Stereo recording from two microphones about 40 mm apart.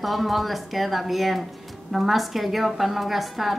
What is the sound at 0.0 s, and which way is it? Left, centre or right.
A woman's voice, centre.